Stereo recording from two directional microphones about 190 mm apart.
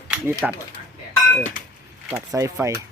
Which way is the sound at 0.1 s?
10° right (ahead or behind).